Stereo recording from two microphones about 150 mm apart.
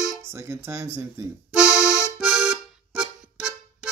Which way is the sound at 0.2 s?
15° right (ahead or behind).